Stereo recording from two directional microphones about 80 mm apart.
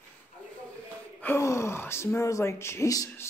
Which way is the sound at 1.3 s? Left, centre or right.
Left.